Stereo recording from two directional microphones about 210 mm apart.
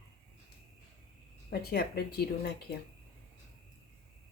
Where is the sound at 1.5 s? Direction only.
45° left (ahead or behind).